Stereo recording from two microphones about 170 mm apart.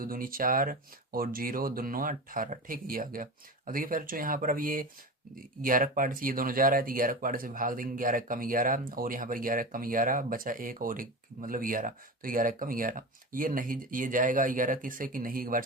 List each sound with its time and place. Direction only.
0.0 s speech: 55° right (ahead or behind)